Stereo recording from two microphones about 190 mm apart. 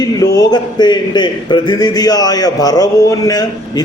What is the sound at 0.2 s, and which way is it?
A man's voice, 20° left (ahead or behind).